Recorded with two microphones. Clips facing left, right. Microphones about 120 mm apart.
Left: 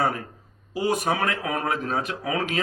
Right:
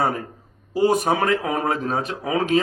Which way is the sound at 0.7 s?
30° right (ahead or behind).